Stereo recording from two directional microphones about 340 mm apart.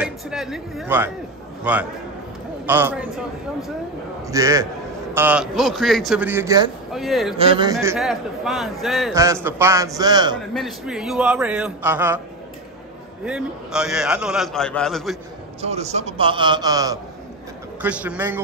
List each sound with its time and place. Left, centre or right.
0.0 s a man's voice: centre
4.3 s a man's voice: centre
7.3 s a man's voice: centre
7.7 s a man's voice: centre
10.5 s a man's voice: centre
13.2 s a man's voice: centre
15.6 s a man's voice: centre